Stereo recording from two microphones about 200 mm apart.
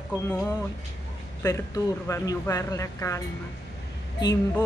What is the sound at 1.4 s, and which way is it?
A woman's voice, 15° left (ahead or behind).